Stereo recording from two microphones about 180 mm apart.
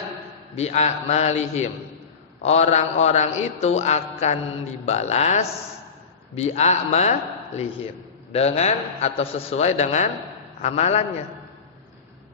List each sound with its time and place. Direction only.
0.5 s a man's voice: 35° left (ahead or behind)